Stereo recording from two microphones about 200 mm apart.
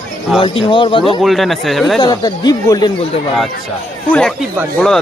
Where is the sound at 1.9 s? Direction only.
20° left (ahead or behind).